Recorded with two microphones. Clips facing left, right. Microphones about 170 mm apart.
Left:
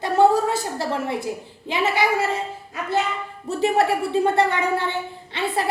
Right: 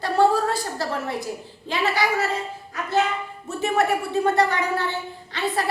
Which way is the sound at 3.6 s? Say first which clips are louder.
Left 2 dB; 30° left (ahead or behind).